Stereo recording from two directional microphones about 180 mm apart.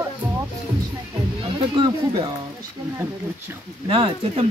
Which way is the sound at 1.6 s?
30° right (ahead or behind).